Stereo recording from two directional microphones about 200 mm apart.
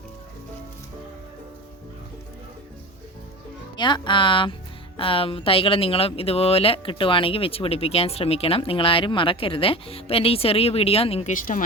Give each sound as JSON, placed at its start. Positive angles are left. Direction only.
{"t": 3.8, "sound": "speech", "side_deg": 25}